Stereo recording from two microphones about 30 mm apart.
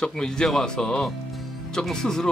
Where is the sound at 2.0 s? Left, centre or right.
Centre.